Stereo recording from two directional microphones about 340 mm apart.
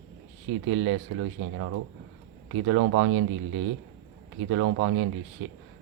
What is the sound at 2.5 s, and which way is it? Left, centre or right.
Speech, right.